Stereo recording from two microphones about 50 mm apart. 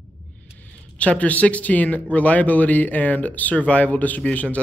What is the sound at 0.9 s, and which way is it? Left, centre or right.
A man's voice, left.